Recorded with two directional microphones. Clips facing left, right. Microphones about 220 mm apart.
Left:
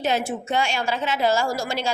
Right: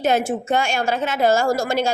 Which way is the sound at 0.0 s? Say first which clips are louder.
Right 5 dB; 50° right (ahead or behind).